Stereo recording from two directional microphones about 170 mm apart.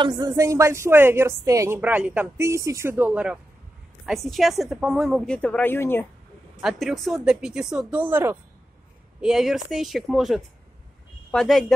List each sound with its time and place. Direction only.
0.0 s a woman's voice: 20° right (ahead or behind); by 6.0 s 15° left (ahead or behind)
6.6 s a woman's voice: centre (ahead or behind)
9.2 s a woman's voice: centre (ahead or behind)